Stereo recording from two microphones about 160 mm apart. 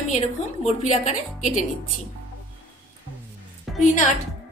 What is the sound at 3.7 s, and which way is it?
Speech, 50° left (ahead or behind).